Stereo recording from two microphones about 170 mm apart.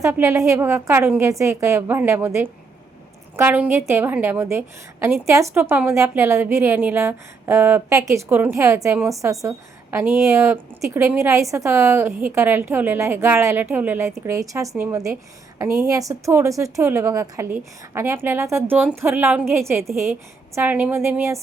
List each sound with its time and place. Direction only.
0.0 s a woman's voice: 15° right (ahead or behind)